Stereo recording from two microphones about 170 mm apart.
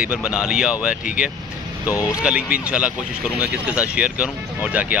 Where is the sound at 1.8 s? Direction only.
15° left (ahead or behind).